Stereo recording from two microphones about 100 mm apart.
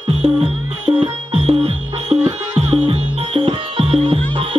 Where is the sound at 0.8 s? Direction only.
90° right.